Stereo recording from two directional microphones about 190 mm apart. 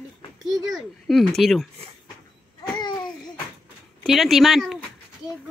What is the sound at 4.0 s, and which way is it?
Speech, centre (ahead or behind).